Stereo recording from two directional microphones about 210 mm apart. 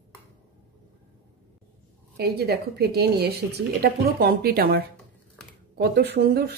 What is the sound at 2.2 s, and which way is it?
A woman's voice, 50° right (ahead or behind).